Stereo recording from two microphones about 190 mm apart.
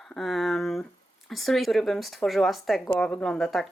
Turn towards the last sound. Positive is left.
turn(degrees=0)  # may be behind; listen again after turning